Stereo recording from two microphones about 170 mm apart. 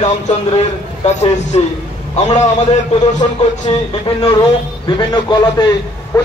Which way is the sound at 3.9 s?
30° left (ahead or behind).